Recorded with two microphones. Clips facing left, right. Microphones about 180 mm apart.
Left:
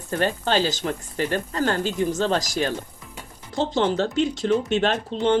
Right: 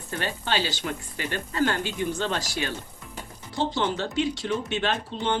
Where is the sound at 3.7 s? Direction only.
45° left (ahead or behind).